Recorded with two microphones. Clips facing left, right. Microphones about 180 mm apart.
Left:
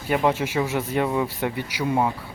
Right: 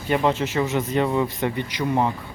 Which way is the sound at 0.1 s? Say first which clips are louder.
Right 1 dB; 10° left (ahead or behind).